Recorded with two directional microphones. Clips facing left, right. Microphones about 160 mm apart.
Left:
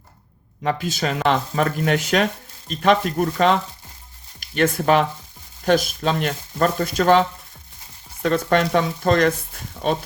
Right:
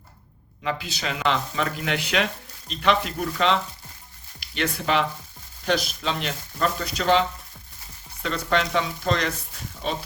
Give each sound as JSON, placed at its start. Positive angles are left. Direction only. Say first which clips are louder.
{"t": 0.6, "sound": "speech", "louder": "left 6 dB", "side_deg": 45}